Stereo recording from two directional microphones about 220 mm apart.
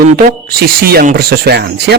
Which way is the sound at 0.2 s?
45° right (ahead or behind).